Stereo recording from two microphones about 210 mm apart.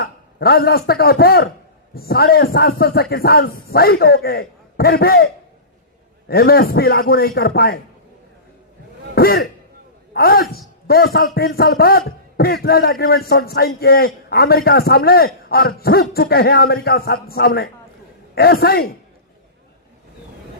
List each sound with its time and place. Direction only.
0.0 s a man's voice: 45° left (ahead or behind)
9.1 s a man's voice: 45° left (ahead or behind)